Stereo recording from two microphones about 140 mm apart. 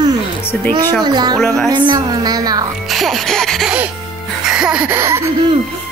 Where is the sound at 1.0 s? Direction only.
30° right (ahead or behind).